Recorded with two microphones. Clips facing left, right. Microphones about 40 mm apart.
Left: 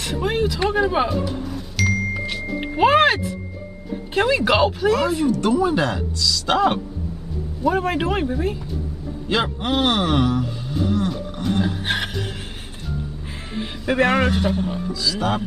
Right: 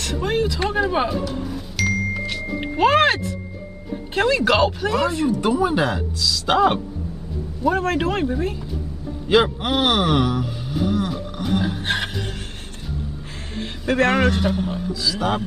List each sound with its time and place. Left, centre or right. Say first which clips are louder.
0.0 s speech: even; centre
1.3 s music: even; centre
4.1 s a man's voice: even; centre
5.3 s speech: left 1 dB; centre
7.6 s a man's voice: even; centre
9.3 s a sound: right 4 dB; centre
13.8 s a man's voice: even; centre